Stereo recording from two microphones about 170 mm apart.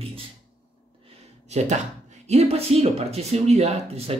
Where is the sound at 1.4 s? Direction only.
45° right (ahead or behind).